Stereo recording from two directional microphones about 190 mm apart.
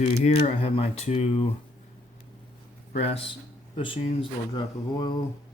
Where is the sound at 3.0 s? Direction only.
30° left (ahead or behind).